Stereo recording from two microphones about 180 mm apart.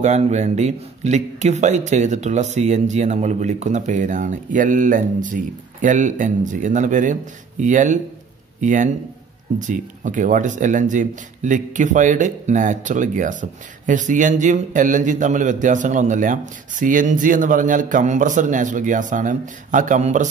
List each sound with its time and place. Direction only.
0.0 s speech: 40° right (ahead or behind)